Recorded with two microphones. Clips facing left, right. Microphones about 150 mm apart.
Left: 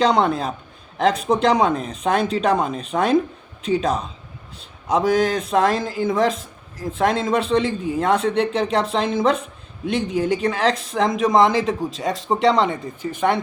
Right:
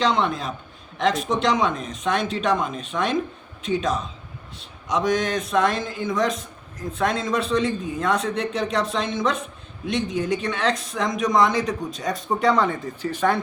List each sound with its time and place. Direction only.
0.0 s speech: 35° left (ahead or behind); by 13.3 s 15° left (ahead or behind)